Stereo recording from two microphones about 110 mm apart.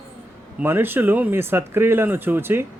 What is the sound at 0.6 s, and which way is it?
A man's voice, 20° right (ahead or behind).